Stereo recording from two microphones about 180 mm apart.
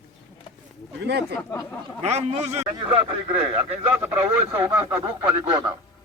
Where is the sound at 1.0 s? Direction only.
70° right (ahead or behind).